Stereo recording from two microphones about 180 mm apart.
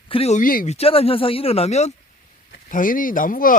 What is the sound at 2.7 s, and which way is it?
Speech, 50° left (ahead or behind).